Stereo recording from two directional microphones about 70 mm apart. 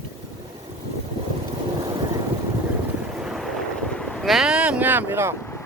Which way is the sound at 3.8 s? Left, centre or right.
Centre.